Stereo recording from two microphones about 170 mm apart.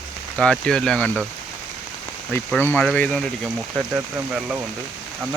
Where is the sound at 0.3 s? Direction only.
5° left (ahead or behind).